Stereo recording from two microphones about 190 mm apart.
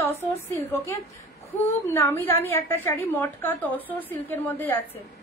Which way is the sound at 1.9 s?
10° left (ahead or behind).